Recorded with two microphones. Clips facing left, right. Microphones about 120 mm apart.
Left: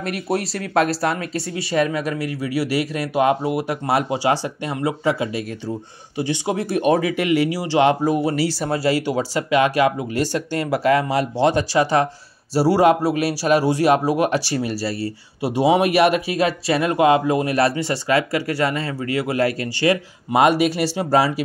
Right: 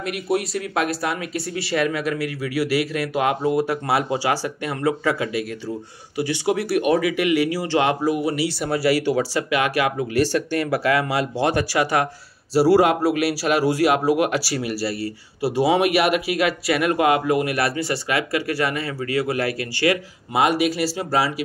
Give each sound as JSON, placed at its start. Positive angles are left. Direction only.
{"t": 0.0, "sound": "speech", "side_deg": 35}
{"t": 15.4, "sound": "speech", "side_deg": 20}
{"t": 15.7, "sound": "speech", "side_deg": 35}